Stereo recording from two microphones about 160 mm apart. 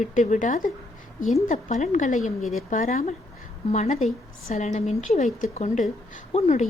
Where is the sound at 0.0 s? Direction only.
50° left (ahead or behind).